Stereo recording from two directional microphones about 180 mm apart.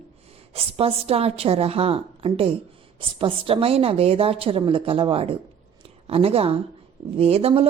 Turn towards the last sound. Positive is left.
turn(degrees=-35)  # may be behind; listen again after turning